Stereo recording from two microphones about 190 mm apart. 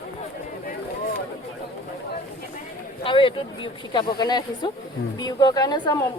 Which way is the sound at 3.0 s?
25° left (ahead or behind).